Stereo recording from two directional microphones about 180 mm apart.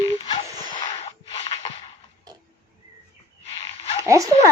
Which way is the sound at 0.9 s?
35° left (ahead or behind).